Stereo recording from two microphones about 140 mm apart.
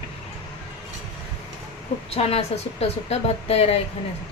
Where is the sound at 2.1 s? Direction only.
45° left (ahead or behind).